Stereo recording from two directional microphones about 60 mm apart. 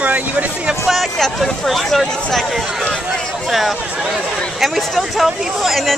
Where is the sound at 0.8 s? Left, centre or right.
Centre.